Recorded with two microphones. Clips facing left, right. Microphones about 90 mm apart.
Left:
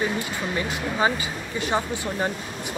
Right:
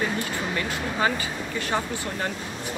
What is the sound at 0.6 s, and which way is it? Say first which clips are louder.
Speech: left 3 dB; 20° left (ahead or behind).